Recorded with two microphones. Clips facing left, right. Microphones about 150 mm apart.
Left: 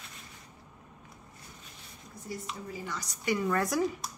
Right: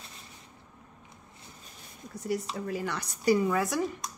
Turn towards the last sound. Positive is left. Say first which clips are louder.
# left 1 dB
turn(degrees=0)  # may be behind; listen again after turning